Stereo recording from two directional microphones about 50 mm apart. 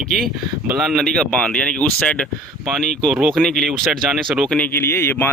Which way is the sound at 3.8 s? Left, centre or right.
Centre.